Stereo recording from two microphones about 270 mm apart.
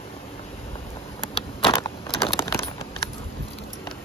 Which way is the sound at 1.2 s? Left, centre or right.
Centre.